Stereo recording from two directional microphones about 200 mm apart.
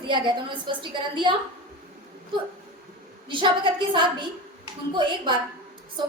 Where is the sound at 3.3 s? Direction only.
25° right (ahead or behind).